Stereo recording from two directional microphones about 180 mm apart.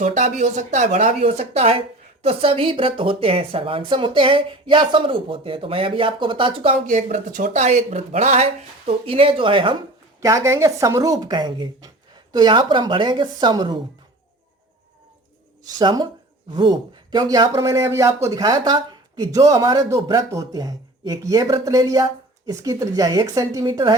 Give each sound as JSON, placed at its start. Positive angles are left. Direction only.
{"t": 0.0, "sound": "speech", "side_deg": -45}
{"t": 6.8, "sound": "speech", "side_deg": -45}
{"t": 10.2, "sound": "speech", "side_deg": -15}
{"t": 15.8, "sound": "speech", "side_deg": -25}